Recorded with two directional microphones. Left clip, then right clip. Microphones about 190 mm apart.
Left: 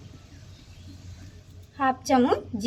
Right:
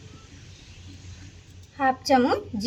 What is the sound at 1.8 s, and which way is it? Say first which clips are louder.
Speech: right 2 dB; 15° left (ahead or behind).